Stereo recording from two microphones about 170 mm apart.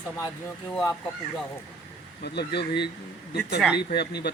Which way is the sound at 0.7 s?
10° left (ahead or behind).